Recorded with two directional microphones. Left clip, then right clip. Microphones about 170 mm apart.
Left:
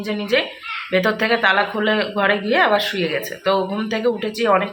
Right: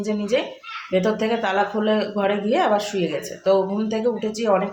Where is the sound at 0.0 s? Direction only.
10° right (ahead or behind).